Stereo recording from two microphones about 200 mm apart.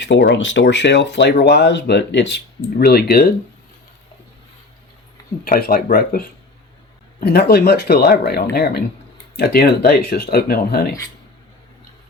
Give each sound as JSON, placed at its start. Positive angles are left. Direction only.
{"t": 0.0, "sound": "speech", "side_deg": 60}
{"t": 5.5, "sound": "speech", "side_deg": 50}